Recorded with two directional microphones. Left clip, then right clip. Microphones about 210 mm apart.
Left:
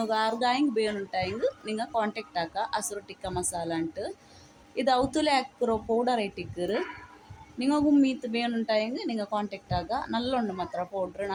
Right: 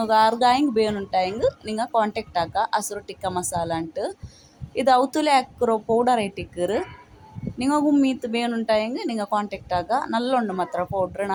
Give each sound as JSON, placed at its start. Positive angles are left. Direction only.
{"t": 0.0, "sound": "a woman's voice", "side_deg": -25}